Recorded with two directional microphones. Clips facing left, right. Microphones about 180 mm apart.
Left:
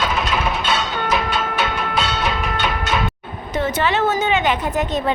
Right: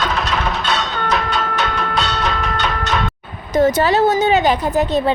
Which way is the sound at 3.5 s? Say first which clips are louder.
Right 6 dB; 40° right (ahead or behind).